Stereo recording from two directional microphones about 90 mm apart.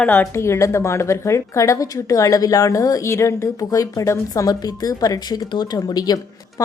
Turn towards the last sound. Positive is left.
turn(degrees=45)  # may be behind; listen again after turning